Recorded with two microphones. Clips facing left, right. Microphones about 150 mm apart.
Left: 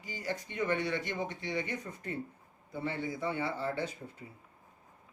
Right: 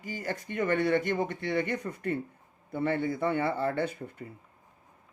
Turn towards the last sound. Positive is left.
turn(degrees=-60)  # may be behind; listen again after turning